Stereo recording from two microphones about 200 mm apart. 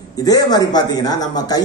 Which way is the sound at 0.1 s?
20° left (ahead or behind).